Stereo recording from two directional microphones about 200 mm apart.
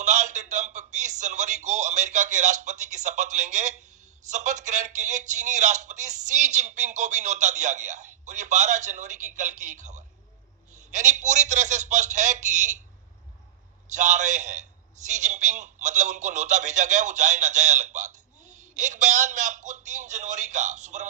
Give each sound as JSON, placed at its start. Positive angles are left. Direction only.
{"t": 0.0, "sound": "speech", "side_deg": -35}
{"t": 13.9, "sound": "speech", "side_deg": -35}